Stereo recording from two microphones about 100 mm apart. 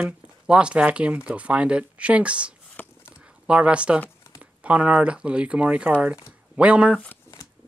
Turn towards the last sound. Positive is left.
turn(degrees=-10)  # may be behind; listen again after turning